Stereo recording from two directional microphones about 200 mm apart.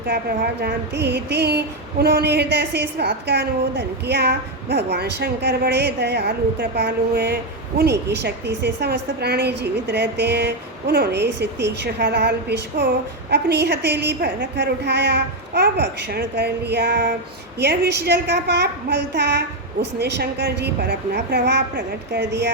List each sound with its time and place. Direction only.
0.1 s speech: 50° right (ahead or behind)